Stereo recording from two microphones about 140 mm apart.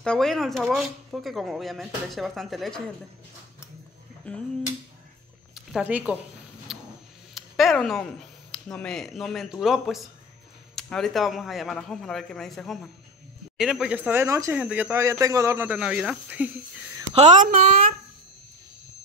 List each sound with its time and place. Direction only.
0.0 s speech: 5° left (ahead or behind)
4.2 s a sound: 10° left (ahead or behind)
5.5 s speech: 5° right (ahead or behind)
6.7 s a sound: centre (ahead or behind)
7.3 s speech: centre (ahead or behind)
17.1 s speech: 55° right (ahead or behind); by 17.9 s 80° right